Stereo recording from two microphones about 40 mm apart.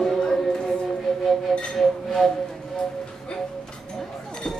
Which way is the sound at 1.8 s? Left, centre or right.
Centre.